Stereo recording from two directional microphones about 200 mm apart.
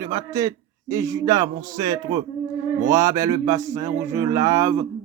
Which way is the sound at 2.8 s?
15° right (ahead or behind).